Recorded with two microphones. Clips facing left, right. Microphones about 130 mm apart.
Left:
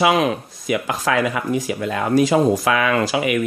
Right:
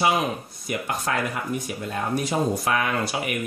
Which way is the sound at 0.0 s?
90° left.